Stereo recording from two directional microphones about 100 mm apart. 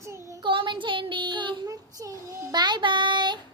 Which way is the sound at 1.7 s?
35° right (ahead or behind).